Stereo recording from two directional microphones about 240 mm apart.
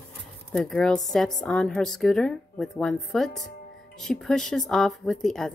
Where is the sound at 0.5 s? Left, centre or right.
Centre.